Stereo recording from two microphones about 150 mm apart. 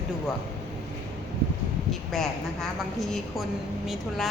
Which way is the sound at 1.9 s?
Centre (ahead or behind).